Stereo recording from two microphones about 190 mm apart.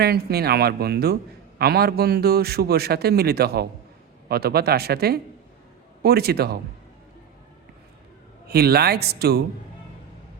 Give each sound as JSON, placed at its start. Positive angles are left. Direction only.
{"t": 0.0, "sound": "a man's voice", "side_deg": -55}
{"t": 8.4, "sound": "a man's voice", "side_deg": -55}